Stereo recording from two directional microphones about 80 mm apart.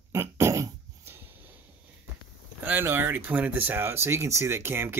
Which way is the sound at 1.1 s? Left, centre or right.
Right.